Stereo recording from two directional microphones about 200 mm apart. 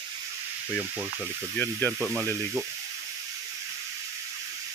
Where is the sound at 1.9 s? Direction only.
10° right (ahead or behind).